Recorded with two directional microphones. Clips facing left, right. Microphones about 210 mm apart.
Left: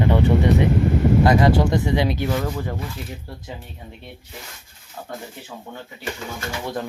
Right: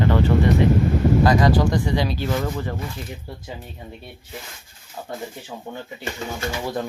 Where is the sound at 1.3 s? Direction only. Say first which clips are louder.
Left 1 dB; 25° left (ahead or behind).